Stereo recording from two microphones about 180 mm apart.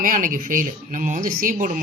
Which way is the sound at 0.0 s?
50° right (ahead or behind).